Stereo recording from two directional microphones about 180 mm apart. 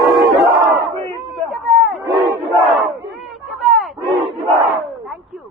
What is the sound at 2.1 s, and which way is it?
Battle cry, 15° right (ahead or behind).